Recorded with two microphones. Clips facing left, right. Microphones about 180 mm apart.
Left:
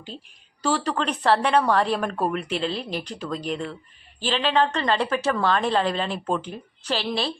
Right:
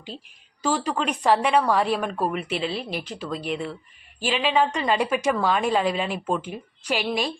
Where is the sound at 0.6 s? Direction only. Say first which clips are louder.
Even; 10° right (ahead or behind).